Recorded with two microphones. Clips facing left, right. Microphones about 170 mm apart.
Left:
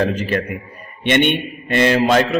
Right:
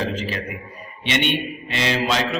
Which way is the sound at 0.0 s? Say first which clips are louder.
Left 7 dB; 60° left (ahead or behind).